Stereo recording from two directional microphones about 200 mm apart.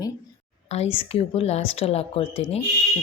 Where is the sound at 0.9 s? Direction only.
30° left (ahead or behind).